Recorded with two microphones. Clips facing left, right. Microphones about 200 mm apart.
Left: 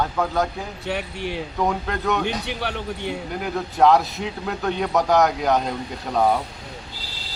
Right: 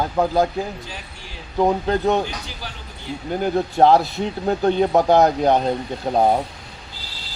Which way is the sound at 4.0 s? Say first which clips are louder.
Right 5 dB; centre (ahead or behind).